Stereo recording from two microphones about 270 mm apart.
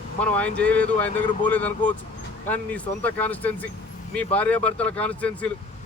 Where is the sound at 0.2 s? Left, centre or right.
Centre.